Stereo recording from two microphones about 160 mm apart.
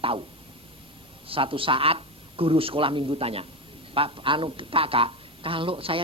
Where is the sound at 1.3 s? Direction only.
35° right (ahead or behind).